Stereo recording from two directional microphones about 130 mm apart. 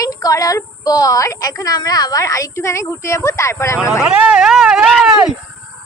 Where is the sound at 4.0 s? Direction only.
10° right (ahead or behind).